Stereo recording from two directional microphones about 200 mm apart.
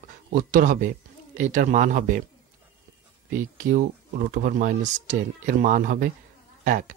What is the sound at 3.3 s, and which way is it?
Speech, 45° right (ahead or behind).